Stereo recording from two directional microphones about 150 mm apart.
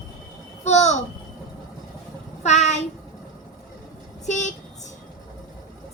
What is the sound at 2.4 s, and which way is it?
Child singing, 50° left (ahead or behind).